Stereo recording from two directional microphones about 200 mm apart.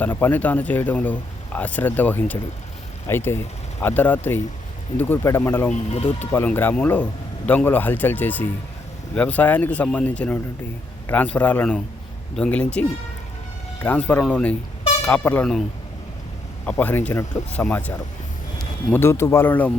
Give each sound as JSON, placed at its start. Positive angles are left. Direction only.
{"t": 0.0, "sound": "a man's voice", "side_deg": 10}
{"t": 5.9, "sound": "speech", "side_deg": 25}
{"t": 6.1, "sound": "a man's voice", "side_deg": 10}
{"t": 13.8, "sound": "a man's voice", "side_deg": 5}
{"t": 16.6, "sound": "a man's voice", "side_deg": 10}